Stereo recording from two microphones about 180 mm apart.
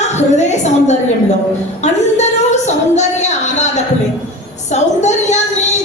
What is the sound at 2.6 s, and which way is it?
Speech, 40° left (ahead or behind).